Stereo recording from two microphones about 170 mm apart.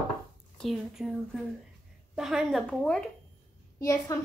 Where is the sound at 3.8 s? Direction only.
20° left (ahead or behind).